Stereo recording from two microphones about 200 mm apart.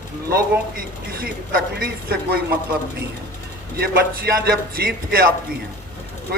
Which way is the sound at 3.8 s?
50° right (ahead or behind).